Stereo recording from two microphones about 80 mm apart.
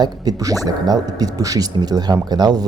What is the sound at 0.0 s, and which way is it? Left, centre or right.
Speech, right.